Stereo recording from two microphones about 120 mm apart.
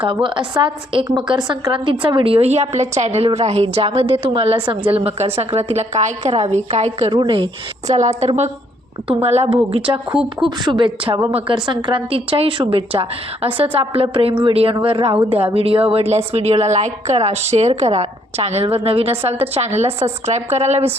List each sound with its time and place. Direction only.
0.0 s a woman's voice: 45° right (ahead or behind); by 7.2 s 60° right (ahead or behind)
7.2 s a woman's voice: 45° right (ahead or behind)
7.9 s a woman's voice: 75° right (ahead or behind)
9.0 s a woman's voice: 60° right (ahead or behind)
9.7 s a woman's voice: 50° right (ahead or behind)
11.3 s a woman's voice: 55° right (ahead or behind)
11.5 s a woman's voice: 40° right (ahead or behind); by 20.9 s 65° right (ahead or behind)